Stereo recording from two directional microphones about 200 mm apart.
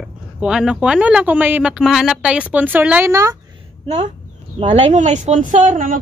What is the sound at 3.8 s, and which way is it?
A woman's voice, 35° right (ahead or behind).